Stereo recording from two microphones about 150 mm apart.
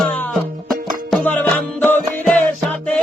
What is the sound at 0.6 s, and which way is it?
Music, centre (ahead or behind).